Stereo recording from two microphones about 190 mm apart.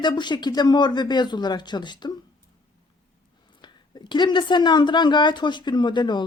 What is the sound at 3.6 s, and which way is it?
Speech, 25° left (ahead or behind).